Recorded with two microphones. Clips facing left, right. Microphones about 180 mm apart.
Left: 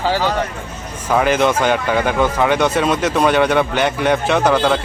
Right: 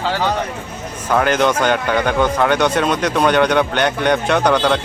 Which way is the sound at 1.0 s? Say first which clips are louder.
Left 1 dB; 5° left (ahead or behind).